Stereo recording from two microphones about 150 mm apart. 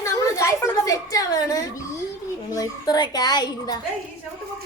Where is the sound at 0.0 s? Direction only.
20° left (ahead or behind).